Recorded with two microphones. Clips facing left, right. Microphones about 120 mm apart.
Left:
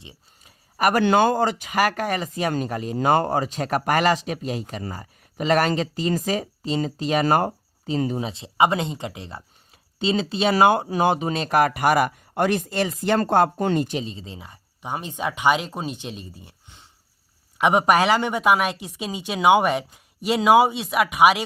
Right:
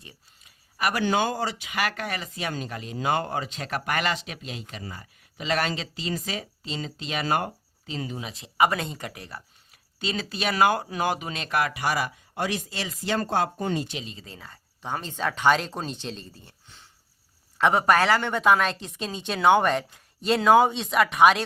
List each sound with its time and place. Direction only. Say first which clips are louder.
0.4 s speech: left 6 dB; 45° left (ahead or behind); by 13.8 s 60° left (ahead or behind)
13.8 s a woman's voice: left 8 dB; 35° left (ahead or behind); by 21.4 s 10° left (ahead or behind)